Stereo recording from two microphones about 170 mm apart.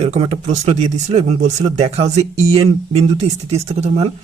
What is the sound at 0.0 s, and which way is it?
Speech, 40° right (ahead or behind).